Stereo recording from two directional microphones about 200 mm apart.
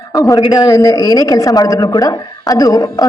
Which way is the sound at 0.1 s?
15° left (ahead or behind).